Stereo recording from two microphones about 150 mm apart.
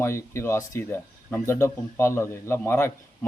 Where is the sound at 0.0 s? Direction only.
20° left (ahead or behind).